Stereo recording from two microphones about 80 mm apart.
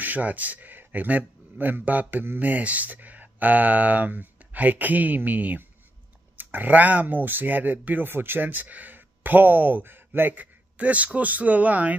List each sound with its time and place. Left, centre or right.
0.0 s speech: right